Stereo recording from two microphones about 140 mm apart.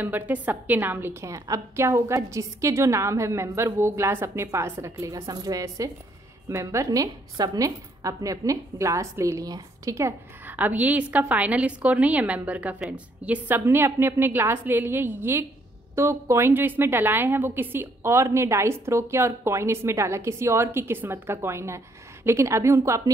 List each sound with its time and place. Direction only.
0.0 s a woman's voice: 15° right (ahead or behind)